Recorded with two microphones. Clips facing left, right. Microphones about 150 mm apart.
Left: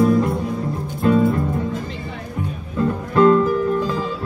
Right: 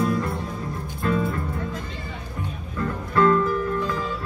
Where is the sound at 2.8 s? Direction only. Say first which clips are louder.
Left 6 dB; 25° left (ahead or behind).